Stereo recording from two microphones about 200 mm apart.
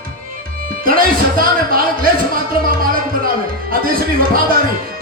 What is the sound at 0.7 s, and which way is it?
Speech, 45° right (ahead or behind).